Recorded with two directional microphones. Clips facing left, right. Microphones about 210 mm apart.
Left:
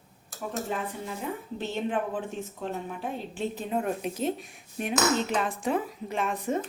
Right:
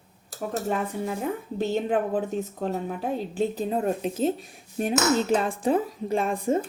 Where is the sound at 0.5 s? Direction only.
45° right (ahead or behind).